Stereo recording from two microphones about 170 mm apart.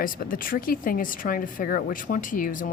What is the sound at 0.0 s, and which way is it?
Speech, 55° left (ahead or behind).